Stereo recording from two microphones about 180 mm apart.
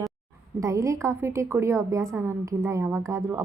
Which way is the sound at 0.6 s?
20° right (ahead or behind).